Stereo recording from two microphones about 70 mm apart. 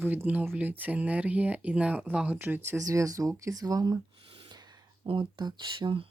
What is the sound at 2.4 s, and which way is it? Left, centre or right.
Speech, right.